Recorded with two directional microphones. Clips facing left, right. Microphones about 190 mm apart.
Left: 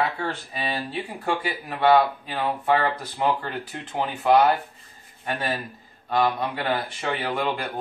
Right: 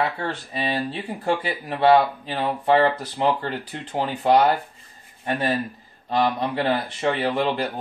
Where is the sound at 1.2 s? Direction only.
30° right (ahead or behind).